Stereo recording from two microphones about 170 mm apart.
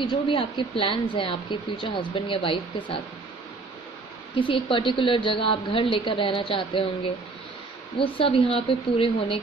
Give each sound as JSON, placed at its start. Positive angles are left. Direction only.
{"t": 0.0, "sound": "a woman's voice", "side_deg": 30}
{"t": 4.4, "sound": "a woman's voice", "side_deg": 30}
{"t": 8.0, "sound": "a woman's voice", "side_deg": 35}